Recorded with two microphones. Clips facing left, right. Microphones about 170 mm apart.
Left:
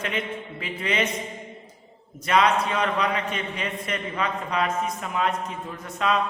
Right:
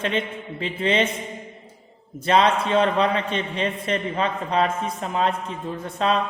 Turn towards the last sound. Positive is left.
turn(degrees=-30)  # may be behind; listen again after turning